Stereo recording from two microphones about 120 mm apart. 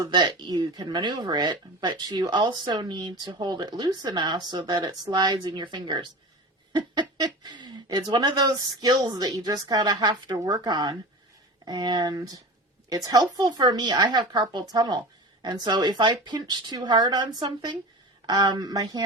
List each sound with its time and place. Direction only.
0.1 s speech: 40° right (ahead or behind)